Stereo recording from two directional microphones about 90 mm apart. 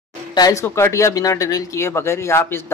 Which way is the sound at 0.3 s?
45° left (ahead or behind).